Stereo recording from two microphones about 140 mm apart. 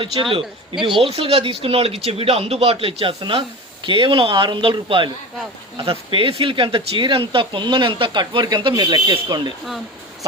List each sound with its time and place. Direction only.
0.0 s speech: 40° right (ahead or behind)